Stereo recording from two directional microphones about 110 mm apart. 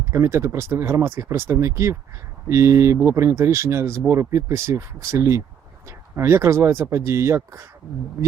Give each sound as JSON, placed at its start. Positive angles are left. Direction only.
{"t": 0.0, "sound": "speech", "side_deg": -25}